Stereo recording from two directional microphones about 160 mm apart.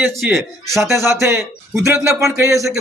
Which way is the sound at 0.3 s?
Centre (ahead or behind).